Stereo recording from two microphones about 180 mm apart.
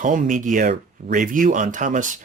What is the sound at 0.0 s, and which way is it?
Speech, 45° right (ahead or behind).